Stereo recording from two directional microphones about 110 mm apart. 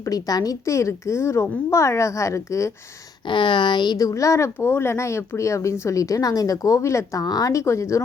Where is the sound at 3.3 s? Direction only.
45° left (ahead or behind); by 8.0 s 25° left (ahead or behind).